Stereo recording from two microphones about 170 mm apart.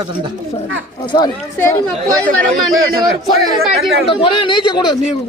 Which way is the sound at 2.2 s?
10° left (ahead or behind).